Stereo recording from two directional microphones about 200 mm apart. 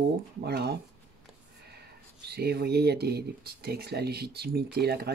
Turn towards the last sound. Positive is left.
turn(degrees=-55)  # may be behind; listen again after turning